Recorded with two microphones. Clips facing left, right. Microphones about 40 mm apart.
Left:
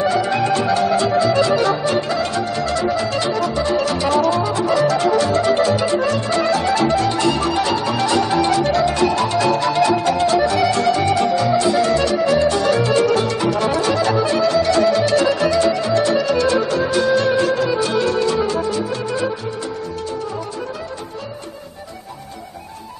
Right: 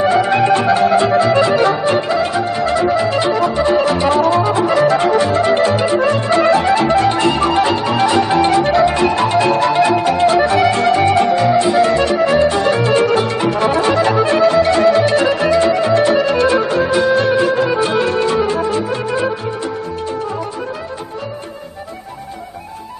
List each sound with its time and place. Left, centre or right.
0.0 s music: right